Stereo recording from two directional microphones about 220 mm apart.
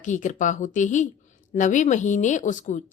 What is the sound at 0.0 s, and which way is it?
A woman's voice, 35° left (ahead or behind).